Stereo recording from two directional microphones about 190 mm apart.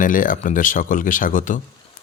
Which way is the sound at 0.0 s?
45° left (ahead or behind).